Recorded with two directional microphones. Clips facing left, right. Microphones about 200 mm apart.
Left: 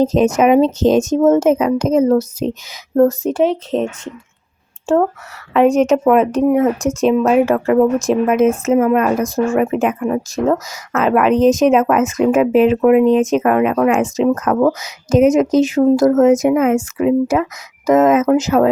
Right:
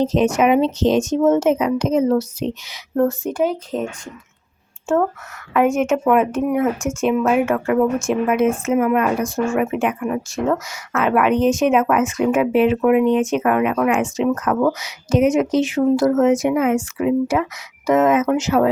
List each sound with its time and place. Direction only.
0.0 s speech: 45° left (ahead or behind)
3.7 s speech: 30° left (ahead or behind)
4.9 s speech: 35° left (ahead or behind)